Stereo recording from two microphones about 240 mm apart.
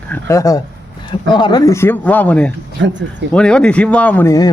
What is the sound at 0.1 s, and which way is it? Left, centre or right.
Speech, centre.